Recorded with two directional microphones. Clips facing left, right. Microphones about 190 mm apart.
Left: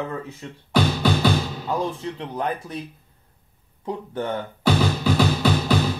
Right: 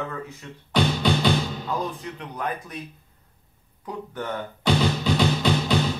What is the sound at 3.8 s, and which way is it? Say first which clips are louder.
Speech: left 5 dB; 25° left (ahead or behind).